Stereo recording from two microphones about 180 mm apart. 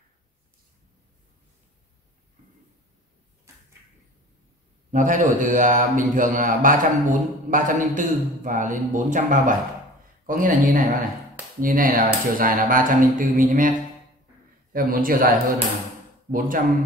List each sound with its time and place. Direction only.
4.9 s speech: 45° right (ahead or behind)